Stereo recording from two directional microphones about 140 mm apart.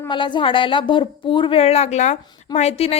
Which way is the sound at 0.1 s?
35° left (ahead or behind).